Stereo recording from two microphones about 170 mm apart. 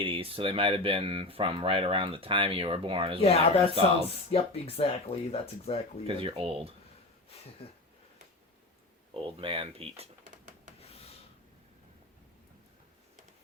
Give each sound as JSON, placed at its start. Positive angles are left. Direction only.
{"t": 0.0, "sound": "speech", "side_deg": -35}
{"t": 3.2, "sound": "speech", "side_deg": 35}
{"t": 6.2, "sound": "speech", "side_deg": -35}
{"t": 7.6, "sound": "speech", "side_deg": 35}
{"t": 9.1, "sound": "speech", "side_deg": -30}
{"t": 10.8, "sound": "rub", "side_deg": 35}